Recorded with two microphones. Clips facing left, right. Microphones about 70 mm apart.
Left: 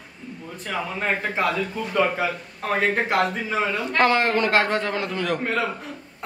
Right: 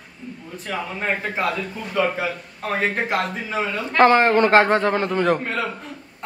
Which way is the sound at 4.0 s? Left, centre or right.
Right.